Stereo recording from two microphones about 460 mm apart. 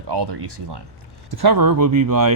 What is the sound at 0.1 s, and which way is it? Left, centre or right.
Speech, right.